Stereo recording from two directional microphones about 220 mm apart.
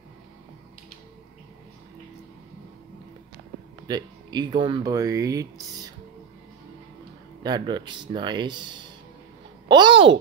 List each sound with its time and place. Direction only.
3.8 s speech: 20° right (ahead or behind)
7.4 s speech: 20° right (ahead or behind)